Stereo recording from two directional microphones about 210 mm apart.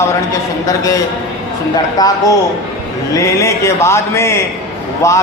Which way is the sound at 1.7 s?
20° left (ahead or behind).